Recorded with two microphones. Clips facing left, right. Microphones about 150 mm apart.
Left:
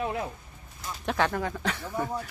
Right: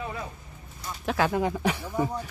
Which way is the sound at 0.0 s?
55° left (ahead or behind).